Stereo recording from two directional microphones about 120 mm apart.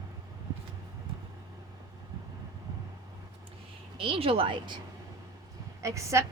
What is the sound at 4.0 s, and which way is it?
Speech, 50° right (ahead or behind).